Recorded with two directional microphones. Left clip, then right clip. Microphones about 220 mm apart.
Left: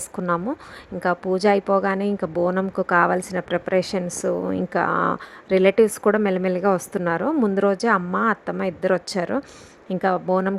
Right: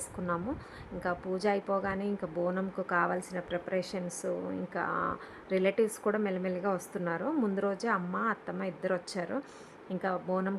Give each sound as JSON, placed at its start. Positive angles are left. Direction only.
{"t": 0.2, "sound": "a woman's voice", "side_deg": 30}